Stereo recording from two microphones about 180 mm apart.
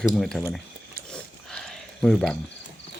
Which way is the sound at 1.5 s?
5° left (ahead or behind).